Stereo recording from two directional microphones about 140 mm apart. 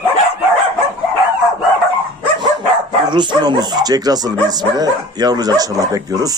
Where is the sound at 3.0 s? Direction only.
30° right (ahead or behind).